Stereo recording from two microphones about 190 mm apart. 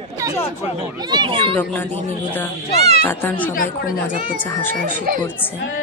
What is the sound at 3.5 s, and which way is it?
Speech, 50° left (ahead or behind).